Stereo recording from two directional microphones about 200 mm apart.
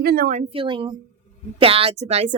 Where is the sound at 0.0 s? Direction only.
50° right (ahead or behind).